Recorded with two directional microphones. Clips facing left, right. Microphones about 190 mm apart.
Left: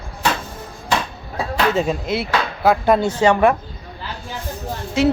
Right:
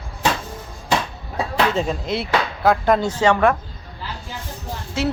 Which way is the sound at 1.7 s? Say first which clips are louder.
Left 2 dB; 5° left (ahead or behind).